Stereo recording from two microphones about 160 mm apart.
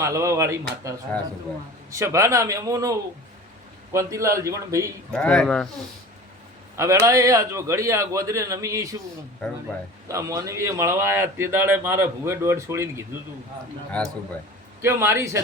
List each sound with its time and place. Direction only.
0.0 s a man's voice: 20° right (ahead or behind)
3.9 s a man's voice: 20° right (ahead or behind)
5.1 s speech: 5° left (ahead or behind)
7.0 s a man's voice: 20° right (ahead or behind)
9.4 s speech: 5° left (ahead or behind)
10.1 s speech: 20° right (ahead or behind)
14.0 s speech: 5° left (ahead or behind)
14.8 s speech: 15° right (ahead or behind)